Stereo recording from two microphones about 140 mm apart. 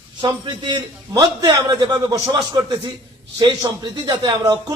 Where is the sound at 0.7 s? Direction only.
30° right (ahead or behind).